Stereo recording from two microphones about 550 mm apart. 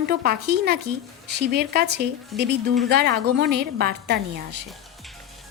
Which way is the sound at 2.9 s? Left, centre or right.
Centre.